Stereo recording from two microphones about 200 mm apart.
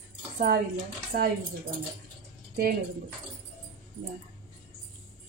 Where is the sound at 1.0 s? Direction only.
50° right (ahead or behind).